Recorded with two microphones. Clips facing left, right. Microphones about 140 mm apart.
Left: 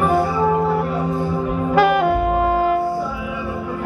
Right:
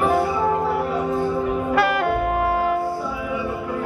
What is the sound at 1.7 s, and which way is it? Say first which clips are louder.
Saxophone: left 6 dB; centre (ahead or behind).